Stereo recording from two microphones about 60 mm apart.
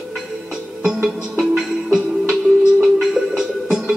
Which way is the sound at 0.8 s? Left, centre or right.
Centre.